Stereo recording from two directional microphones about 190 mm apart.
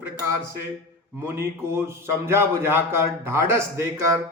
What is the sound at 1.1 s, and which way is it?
A man's voice, 15° right (ahead or behind).